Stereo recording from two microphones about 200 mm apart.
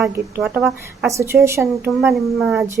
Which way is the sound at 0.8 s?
15° right (ahead or behind).